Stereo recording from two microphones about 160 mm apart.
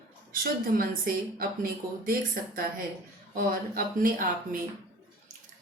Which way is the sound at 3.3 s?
65° right (ahead or behind).